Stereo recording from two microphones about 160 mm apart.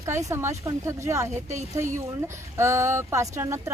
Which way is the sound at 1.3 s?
45° right (ahead or behind).